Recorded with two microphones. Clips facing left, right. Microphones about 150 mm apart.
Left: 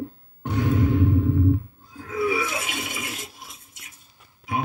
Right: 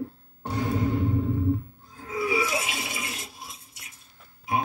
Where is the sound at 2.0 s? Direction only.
60° left (ahead or behind).